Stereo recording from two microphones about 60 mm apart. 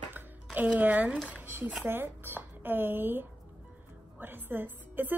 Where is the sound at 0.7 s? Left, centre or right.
Right.